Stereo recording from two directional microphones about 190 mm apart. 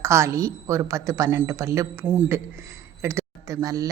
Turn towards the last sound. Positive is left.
turn(degrees=-15)  # may be behind; listen again after turning